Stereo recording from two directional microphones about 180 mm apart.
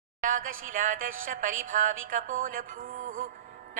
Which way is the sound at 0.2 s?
50° right (ahead or behind).